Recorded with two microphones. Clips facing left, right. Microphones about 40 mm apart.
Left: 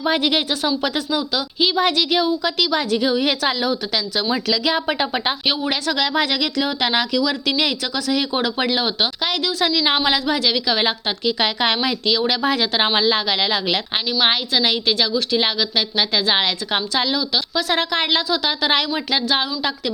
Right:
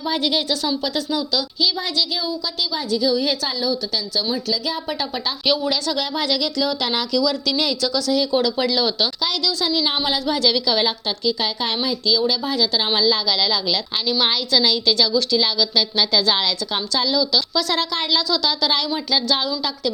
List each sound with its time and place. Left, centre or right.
0.0 s speech: left
1.7 s a woman's voice: left
10.4 s a woman's voice: left
11.3 s a woman's voice: left
17.9 s speech: left